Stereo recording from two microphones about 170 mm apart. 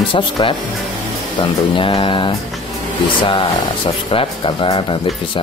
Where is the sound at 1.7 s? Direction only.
30° left (ahead or behind).